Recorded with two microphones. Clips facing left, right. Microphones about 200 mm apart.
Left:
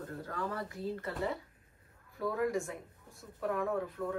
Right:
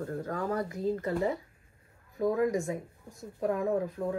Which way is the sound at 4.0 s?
40° right (ahead or behind).